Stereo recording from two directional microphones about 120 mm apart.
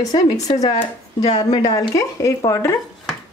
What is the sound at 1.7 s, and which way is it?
Speech, 30° left (ahead or behind).